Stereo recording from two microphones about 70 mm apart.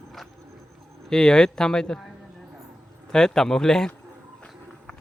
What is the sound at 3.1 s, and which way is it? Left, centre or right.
Speech, centre.